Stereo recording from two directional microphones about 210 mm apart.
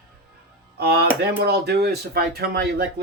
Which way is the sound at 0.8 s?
50° right (ahead or behind).